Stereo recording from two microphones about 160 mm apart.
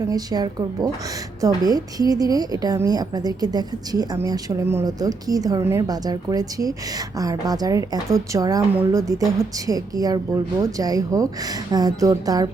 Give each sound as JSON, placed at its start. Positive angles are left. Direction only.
{"t": 0.1, "sound": "a woman's voice", "side_deg": -25}